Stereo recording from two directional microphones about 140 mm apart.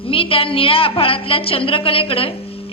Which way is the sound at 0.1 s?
40° left (ahead or behind).